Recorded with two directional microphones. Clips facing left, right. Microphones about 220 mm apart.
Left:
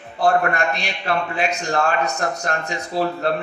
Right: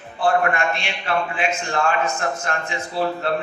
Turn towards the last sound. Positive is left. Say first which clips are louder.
# left 2 dB
turn(degrees=40)  # may be behind; listen again after turning